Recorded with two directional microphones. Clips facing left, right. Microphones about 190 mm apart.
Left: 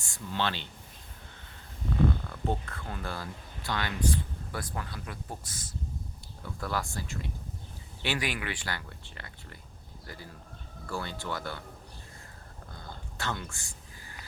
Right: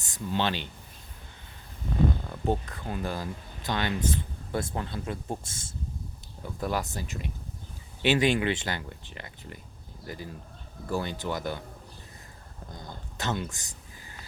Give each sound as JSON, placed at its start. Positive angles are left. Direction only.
{"t": 0.0, "sound": "speech", "side_deg": -20}
{"t": 2.3, "sound": "speech", "side_deg": -15}
{"t": 12.7, "sound": "a sound", "side_deg": -20}